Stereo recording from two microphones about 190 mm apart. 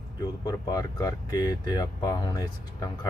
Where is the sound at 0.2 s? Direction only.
20° left (ahead or behind).